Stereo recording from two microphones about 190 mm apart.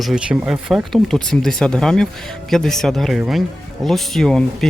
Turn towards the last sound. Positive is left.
turn(degrees=0)  # may be behind; listen again after turning